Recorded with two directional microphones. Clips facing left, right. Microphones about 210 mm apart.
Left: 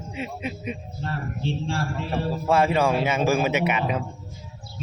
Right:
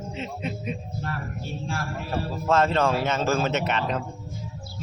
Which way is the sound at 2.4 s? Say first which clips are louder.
Left 1 dB; 10° left (ahead or behind).